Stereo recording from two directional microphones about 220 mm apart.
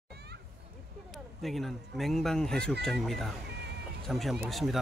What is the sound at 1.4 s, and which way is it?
Speech, centre (ahead or behind).